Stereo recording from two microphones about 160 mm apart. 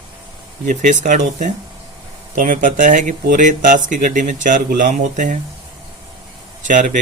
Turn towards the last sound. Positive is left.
turn(degrees=-55)  # may be behind; listen again after turning